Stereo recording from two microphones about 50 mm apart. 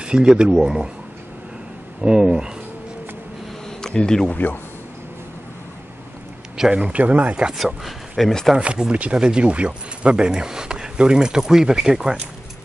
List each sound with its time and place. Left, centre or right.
0.0 s speech: centre
2.0 s speech: centre
3.8 s speech: centre
4.3 s a man's voice: left
6.5 s speech: centre; by 7.3 s right
7.5 s speech: centre
8.5 s speech: centre